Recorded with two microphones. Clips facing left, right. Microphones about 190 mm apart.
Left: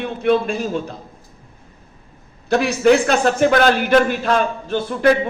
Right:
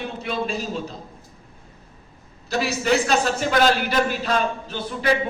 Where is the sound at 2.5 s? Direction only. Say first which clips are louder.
Left 8 dB; 55° left (ahead or behind).